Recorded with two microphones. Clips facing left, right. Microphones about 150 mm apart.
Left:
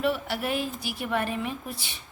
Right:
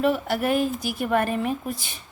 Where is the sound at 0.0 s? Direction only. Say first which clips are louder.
Right 5 dB; 45° right (ahead or behind).